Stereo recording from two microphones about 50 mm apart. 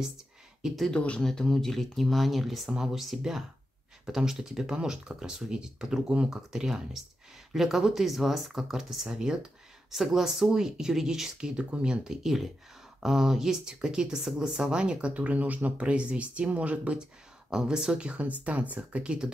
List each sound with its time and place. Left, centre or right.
0.9 s speech: left
1.2 s speech: centre
11.3 s speech: right
17.5 s speech: centre